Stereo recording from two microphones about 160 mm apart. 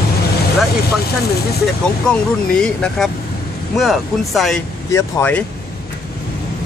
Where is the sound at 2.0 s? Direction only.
5° left (ahead or behind).